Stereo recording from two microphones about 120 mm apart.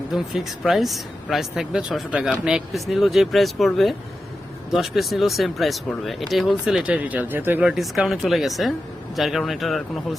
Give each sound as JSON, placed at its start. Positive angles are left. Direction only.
{"t": 0.1, "sound": "speech", "side_deg": 0}
{"t": 6.8, "sound": "speech", "side_deg": -10}
{"t": 7.6, "sound": "speech", "side_deg": -5}